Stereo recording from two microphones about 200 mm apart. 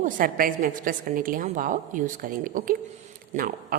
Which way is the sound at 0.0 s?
45° right (ahead or behind).